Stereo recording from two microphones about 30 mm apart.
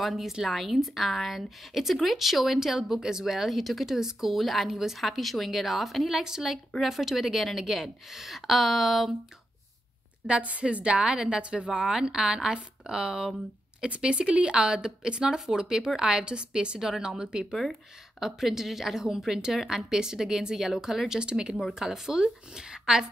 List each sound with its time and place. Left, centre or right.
0.0 s a woman's voice: centre
3.3 s a woman's voice: centre
5.0 s speech: centre
6.0 s a woman's voice: centre
10.6 s a woman's voice: right
13.8 s a woman's voice: right
16.8 s a woman's voice: centre
18.2 s a woman's voice: centre
19.5 s a woman's voice: centre
19.9 s a woman's voice: right
21.2 s speech: right
21.7 s a woman's voice: centre